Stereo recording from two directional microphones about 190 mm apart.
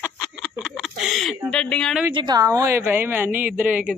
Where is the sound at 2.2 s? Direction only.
20° right (ahead or behind).